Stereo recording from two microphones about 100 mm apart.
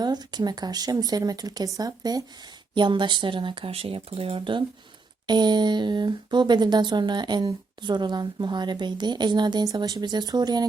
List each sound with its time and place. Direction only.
0.0 s speech: 45° right (ahead or behind)
2.7 s speech: 50° right (ahead or behind)
5.2 s speech: 45° right (ahead or behind)